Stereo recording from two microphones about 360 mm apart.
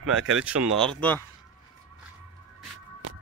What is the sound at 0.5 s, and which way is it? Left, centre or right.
Speech, right.